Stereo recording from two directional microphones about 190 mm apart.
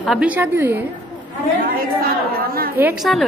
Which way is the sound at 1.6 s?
50° right (ahead or behind).